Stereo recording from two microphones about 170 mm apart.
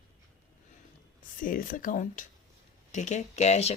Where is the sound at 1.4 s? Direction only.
50° left (ahead or behind).